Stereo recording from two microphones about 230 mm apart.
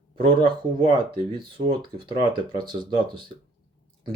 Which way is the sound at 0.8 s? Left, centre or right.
Right.